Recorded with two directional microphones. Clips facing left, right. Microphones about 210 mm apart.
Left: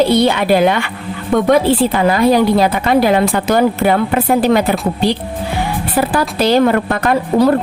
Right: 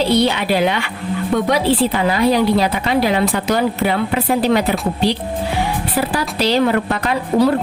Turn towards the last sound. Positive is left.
turn(degrees=50)  # may be behind; listen again after turning